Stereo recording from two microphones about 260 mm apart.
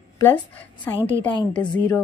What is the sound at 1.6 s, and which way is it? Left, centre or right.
Speech, centre.